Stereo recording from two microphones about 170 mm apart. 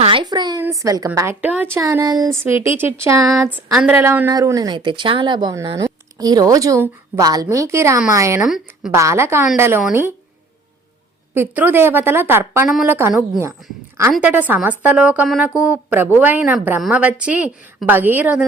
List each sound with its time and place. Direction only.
0.0 s a sound: 30° right (ahead or behind)
0.6 s a woman's voice: 20° right (ahead or behind)
8.4 s a woman's voice: 5° right (ahead or behind)
8.9 s a woman's voice: 15° right (ahead or behind)
11.3 s a woman's voice: 10° right (ahead or behind)